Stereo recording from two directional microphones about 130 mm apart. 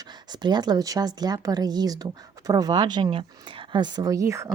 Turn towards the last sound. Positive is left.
turn(degrees=-25)  # may be behind; listen again after turning